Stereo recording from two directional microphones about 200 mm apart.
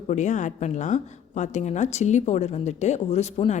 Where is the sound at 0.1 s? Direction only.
35° left (ahead or behind).